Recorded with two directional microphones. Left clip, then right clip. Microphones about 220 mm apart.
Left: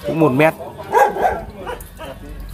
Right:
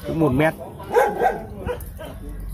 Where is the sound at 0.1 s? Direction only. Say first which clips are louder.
Left 5 dB; 15° left (ahead or behind).